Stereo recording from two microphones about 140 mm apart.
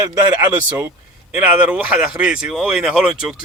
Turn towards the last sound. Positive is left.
turn(degrees=-5)  # may be behind; listen again after turning